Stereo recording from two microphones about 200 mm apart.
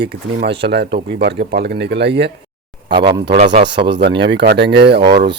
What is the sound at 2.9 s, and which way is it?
Speech, 25° right (ahead or behind).